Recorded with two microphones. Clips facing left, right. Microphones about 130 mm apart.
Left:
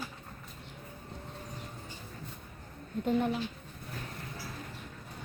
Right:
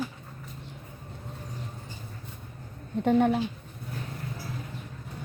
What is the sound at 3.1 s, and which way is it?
Speech, 65° right (ahead or behind).